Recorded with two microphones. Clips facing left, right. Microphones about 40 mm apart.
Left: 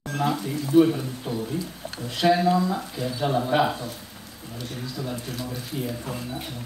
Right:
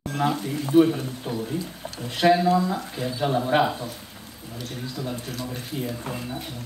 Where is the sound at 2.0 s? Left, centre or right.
Centre.